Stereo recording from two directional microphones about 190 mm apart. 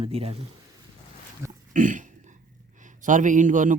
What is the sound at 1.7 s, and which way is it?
A man's voice, 45° right (ahead or behind).